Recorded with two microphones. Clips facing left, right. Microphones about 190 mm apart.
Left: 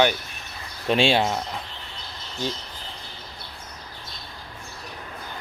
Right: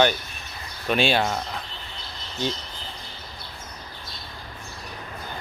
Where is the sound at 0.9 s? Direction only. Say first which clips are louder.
Left 2 dB; 25° left (ahead or behind).